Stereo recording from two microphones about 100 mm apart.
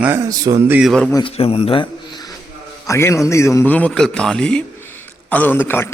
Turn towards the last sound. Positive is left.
turn(degrees=20)  # may be behind; listen again after turning